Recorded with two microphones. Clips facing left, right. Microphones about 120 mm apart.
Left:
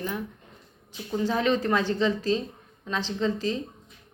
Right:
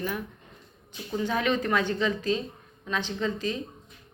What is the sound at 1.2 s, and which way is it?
A woman's voice, 30° left (ahead or behind).